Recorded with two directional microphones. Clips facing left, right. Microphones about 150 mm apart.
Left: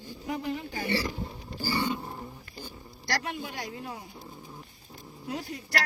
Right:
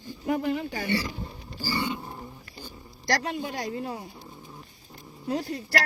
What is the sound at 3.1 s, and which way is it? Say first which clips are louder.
Speech: right 5 dB; 35° right (ahead or behind).